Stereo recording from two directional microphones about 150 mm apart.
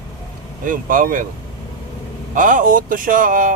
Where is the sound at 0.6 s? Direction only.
70° right (ahead or behind).